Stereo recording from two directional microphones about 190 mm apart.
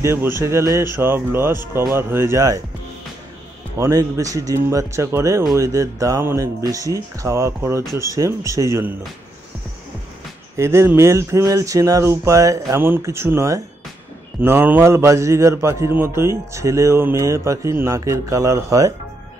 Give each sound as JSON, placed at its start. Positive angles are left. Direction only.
{"t": 0.0, "sound": "a man's voice", "side_deg": -15}
{"t": 3.7, "sound": "a man's voice", "side_deg": -15}
{"t": 10.6, "sound": "a man's voice", "side_deg": -15}